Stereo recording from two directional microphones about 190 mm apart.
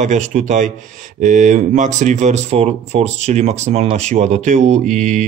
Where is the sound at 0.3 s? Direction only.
40° right (ahead or behind).